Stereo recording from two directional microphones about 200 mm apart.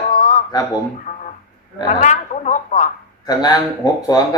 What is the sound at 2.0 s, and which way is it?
Speech, 35° left (ahead or behind).